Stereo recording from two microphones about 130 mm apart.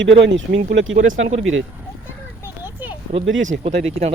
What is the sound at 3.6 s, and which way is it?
Speech, 55° right (ahead or behind).